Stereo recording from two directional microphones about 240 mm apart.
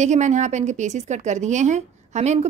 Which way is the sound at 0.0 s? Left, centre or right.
Right.